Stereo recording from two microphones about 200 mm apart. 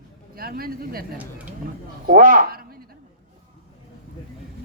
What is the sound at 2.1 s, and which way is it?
Speech, 40° right (ahead or behind).